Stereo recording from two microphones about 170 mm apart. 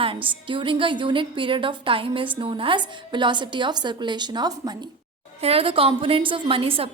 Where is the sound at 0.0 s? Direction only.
30° right (ahead or behind).